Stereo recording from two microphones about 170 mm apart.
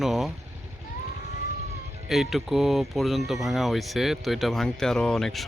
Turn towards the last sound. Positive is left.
turn(degrees=0)  # may be behind; listen again after turning